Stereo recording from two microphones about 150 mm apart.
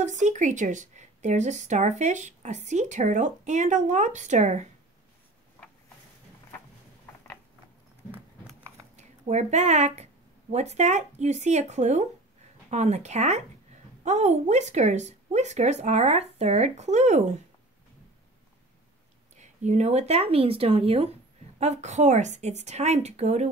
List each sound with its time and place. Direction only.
0.0 s a woman's voice: 55° right (ahead or behind)
8.9 s a woman's voice: 50° right (ahead or behind)
19.3 s a woman's voice: 50° right (ahead or behind)